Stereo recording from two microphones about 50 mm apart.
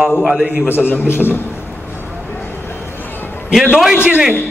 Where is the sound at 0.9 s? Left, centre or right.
Left.